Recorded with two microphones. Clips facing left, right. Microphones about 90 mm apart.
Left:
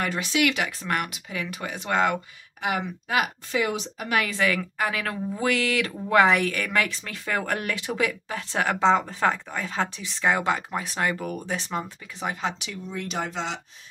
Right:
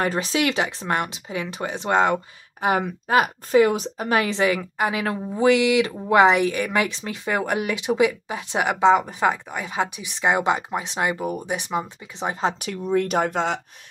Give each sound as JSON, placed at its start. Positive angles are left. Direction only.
{"t": 0.0, "sound": "speech", "side_deg": -35}
{"t": 12.3, "sound": "speech", "side_deg": -35}
{"t": 12.5, "sound": "speech", "side_deg": -50}